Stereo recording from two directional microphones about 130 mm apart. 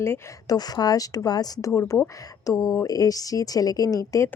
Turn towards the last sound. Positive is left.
turn(degrees=25)  # may be behind; listen again after turning